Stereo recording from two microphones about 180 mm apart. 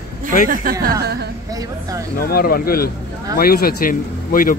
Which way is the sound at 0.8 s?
60° right (ahead or behind).